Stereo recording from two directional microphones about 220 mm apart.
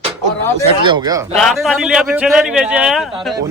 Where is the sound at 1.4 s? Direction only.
Centre (ahead or behind).